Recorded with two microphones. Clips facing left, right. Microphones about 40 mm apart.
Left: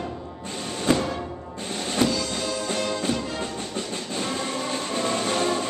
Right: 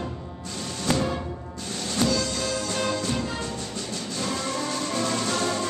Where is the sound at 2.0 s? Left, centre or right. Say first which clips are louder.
Even; left.